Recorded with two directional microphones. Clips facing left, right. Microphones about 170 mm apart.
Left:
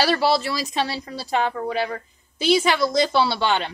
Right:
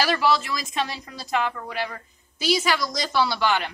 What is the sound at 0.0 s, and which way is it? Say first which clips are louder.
A woman's voice: left 2 dB; 35° left (ahead or behind).